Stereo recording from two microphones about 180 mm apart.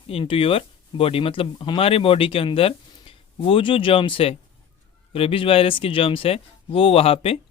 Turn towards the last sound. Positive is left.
turn(degrees=30)  # may be behind; listen again after turning